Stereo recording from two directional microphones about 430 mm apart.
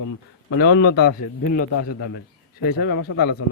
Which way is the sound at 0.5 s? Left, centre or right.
Left.